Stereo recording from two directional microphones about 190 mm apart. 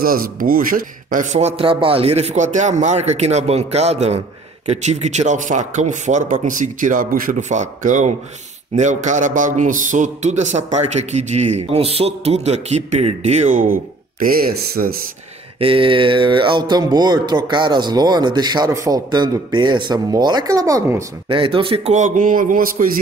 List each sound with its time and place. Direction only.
0.0 s a man's voice: 50° right (ahead or behind)
15.6 s speech: 30° right (ahead or behind); by 22.8 s 45° right (ahead or behind)